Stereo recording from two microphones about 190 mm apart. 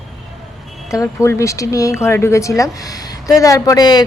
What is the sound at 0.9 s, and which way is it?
A woman's voice, 15° left (ahead or behind).